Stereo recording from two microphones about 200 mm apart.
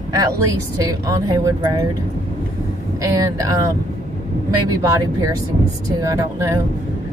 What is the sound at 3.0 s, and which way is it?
Speech, 15° right (ahead or behind).